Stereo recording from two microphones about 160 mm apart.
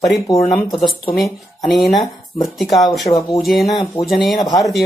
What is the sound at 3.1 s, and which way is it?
Speech, 20° left (ahead or behind).